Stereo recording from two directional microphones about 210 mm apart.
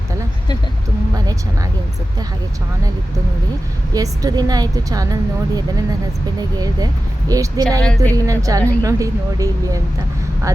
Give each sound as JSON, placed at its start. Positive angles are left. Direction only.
{"t": 3.9, "sound": "a woman's voice", "side_deg": -15}
{"t": 7.8, "sound": "speech", "side_deg": 5}
{"t": 8.1, "sound": "a woman's voice", "side_deg": -15}